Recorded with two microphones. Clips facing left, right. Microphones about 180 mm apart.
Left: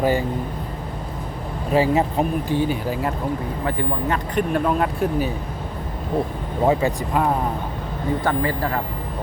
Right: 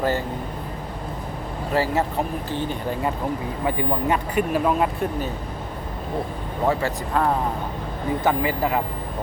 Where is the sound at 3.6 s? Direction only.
15° right (ahead or behind).